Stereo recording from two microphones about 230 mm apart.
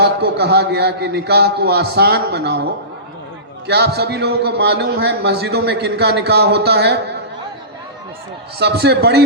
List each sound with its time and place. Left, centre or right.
0.0 s a man's voice: right
3.7 s a man's voice: right
8.5 s a man's voice: right